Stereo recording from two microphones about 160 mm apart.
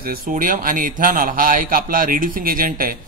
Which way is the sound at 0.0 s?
60° right (ahead or behind).